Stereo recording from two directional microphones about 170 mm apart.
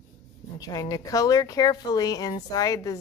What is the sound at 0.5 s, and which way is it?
Speech, 20° left (ahead or behind).